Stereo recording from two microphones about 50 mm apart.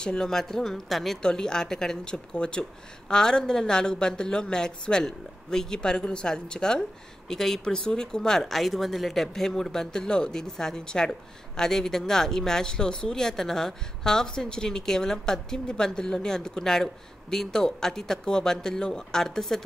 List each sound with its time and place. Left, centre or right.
0.0 s speech: centre
1.2 s speech: centre